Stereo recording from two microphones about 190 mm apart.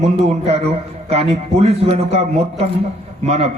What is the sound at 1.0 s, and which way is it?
A man's voice, 35° right (ahead or behind).